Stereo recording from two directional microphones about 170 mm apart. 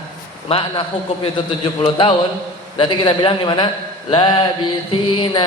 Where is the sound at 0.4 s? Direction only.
35° left (ahead or behind).